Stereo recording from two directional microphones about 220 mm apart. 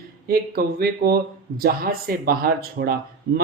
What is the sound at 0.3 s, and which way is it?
A man's voice, 45° right (ahead or behind).